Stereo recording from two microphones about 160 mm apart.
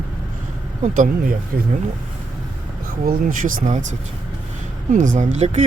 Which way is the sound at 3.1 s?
55° right (ahead or behind).